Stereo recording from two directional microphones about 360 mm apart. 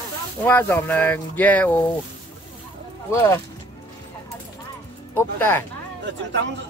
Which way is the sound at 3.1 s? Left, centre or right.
Centre.